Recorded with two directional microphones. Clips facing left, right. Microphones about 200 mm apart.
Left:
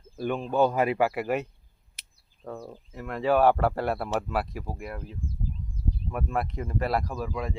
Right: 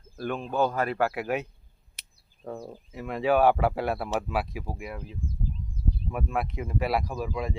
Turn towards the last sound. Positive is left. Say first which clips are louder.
# right 1 dB
turn(degrees=-10)  # may be behind; listen again after turning